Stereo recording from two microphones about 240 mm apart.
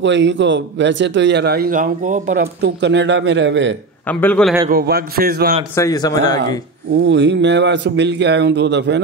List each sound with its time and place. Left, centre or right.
0.0 s a man's voice: right
4.1 s speech: centre
4.6 s a man's voice: right
5.8 s speech: centre
7.1 s a man's voice: right